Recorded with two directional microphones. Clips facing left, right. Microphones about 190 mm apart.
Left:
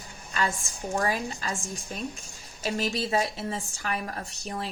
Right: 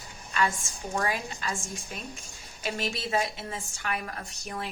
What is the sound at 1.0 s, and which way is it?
Speech, 40° left (ahead or behind).